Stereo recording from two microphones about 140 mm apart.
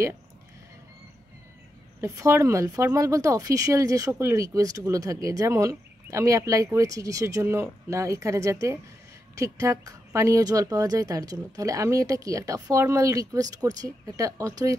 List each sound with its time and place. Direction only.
2.0 s speech: 20° right (ahead or behind)